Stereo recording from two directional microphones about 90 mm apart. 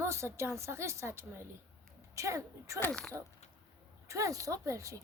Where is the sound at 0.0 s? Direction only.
30° right (ahead or behind).